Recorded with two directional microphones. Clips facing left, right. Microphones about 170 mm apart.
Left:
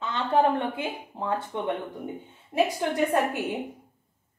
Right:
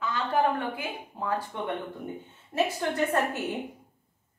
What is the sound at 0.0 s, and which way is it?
A woman's voice, 25° left (ahead or behind).